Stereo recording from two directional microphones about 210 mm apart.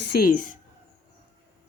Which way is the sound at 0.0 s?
50° left (ahead or behind).